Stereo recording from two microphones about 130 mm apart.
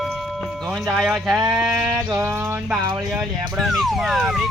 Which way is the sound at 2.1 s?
20° right (ahead or behind).